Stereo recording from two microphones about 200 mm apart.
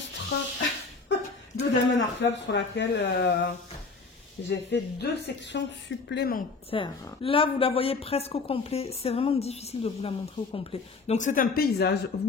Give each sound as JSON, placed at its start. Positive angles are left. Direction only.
{"t": 0.1, "sound": "a sound", "side_deg": 65}
{"t": 1.6, "sound": "speech", "side_deg": 65}
{"t": 4.5, "sound": "speech", "side_deg": 60}
{"t": 6.7, "sound": "a woman's voice", "side_deg": 25}